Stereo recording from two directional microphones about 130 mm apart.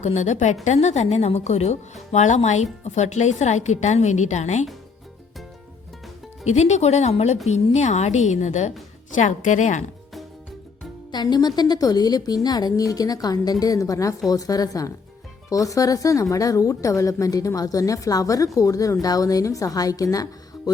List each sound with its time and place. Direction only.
0.0 s speech: 65° left (ahead or behind)
6.4 s speech: 60° left (ahead or behind)
11.1 s speech: 30° left (ahead or behind)